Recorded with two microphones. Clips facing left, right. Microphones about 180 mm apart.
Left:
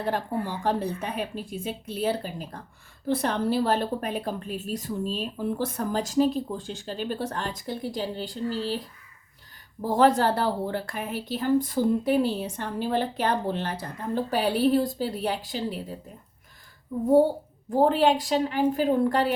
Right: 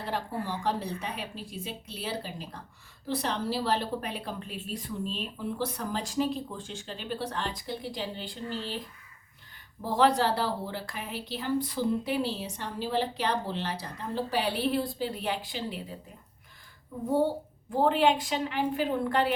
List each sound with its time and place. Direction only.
0.1 s a woman's voice: 50° left (ahead or behind)
9.8 s a woman's voice: 45° left (ahead or behind)
17.7 s a woman's voice: 40° left (ahead or behind)